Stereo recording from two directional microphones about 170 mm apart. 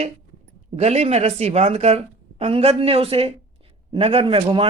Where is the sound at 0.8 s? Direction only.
40° right (ahead or behind).